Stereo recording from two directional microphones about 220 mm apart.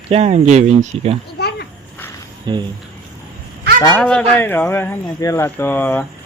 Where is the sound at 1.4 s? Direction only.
50° left (ahead or behind).